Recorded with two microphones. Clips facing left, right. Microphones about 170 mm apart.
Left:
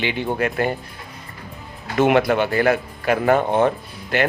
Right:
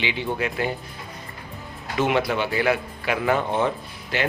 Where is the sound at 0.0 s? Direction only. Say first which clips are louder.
Left 4 dB; 50° left (ahead or behind).